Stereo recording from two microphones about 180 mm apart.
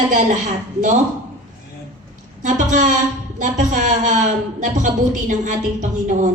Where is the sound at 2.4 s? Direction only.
45° right (ahead or behind).